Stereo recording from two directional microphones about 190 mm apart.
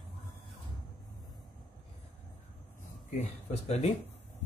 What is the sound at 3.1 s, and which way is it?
Speech, 35° left (ahead or behind).